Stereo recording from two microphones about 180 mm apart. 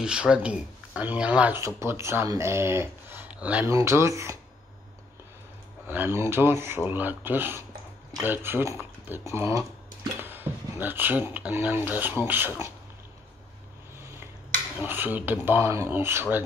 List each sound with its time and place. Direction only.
0.0 s speech: 5° right (ahead or behind)
5.9 s speech: 10° right (ahead or behind)
14.8 s speech: 10° right (ahead or behind)